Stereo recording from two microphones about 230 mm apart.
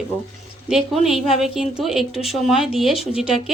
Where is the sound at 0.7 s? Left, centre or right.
Centre.